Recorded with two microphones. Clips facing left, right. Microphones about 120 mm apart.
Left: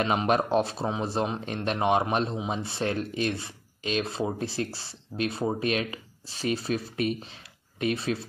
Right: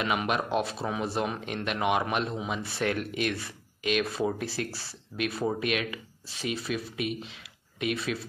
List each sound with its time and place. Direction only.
0.0 s speech: 35° left (ahead or behind)